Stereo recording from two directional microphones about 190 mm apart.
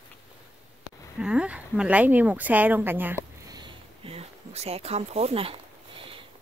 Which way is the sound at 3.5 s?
25° right (ahead or behind).